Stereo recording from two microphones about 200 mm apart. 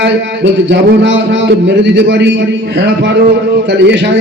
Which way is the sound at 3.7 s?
60° right (ahead or behind).